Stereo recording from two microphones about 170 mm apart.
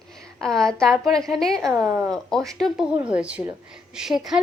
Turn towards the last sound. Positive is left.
turn(degrees=-5)  # may be behind; listen again after turning